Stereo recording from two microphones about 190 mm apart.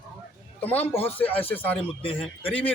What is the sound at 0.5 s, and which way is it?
A man's voice, 10° left (ahead or behind).